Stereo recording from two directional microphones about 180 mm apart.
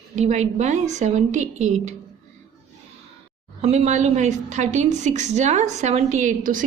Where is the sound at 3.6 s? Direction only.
40° right (ahead or behind).